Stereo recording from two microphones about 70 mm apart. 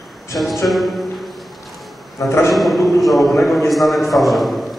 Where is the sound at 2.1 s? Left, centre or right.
Left.